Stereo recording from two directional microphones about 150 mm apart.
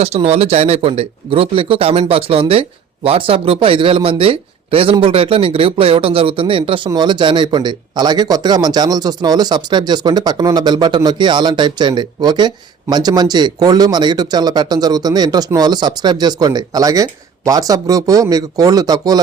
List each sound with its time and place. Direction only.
0.0 s a man's voice: 45° right (ahead or behind); by 19.2 s 25° right (ahead or behind)